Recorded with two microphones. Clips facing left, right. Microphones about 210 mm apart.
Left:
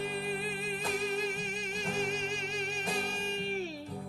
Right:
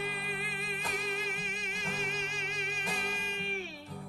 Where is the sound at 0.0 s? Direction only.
40° left (ahead or behind).